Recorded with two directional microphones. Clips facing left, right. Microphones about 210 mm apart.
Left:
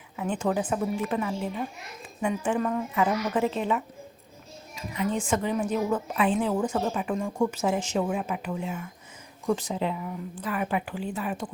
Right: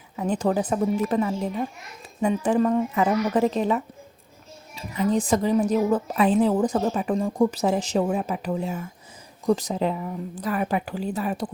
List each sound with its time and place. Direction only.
0.2 s a woman's voice: 35° right (ahead or behind)